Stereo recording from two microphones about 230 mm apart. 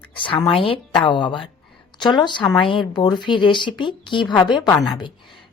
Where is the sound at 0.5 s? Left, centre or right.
Left.